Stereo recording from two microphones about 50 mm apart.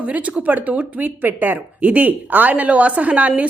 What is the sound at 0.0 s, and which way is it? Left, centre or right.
A woman's voice, right.